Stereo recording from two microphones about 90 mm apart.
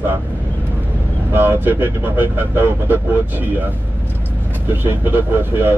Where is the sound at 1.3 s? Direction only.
25° right (ahead or behind).